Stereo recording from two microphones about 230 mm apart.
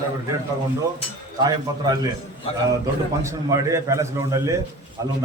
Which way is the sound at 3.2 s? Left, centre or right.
Centre.